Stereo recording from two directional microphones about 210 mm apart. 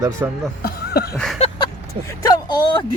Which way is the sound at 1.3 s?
30° left (ahead or behind).